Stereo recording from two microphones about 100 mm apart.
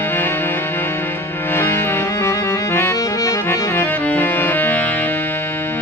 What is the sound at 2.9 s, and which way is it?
Accordion, 35° left (ahead or behind).